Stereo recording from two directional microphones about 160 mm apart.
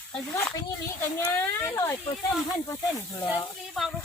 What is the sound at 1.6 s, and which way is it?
Speech, 15° left (ahead or behind).